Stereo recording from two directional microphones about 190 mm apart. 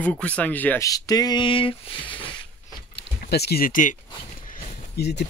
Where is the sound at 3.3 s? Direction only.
60° left (ahead or behind).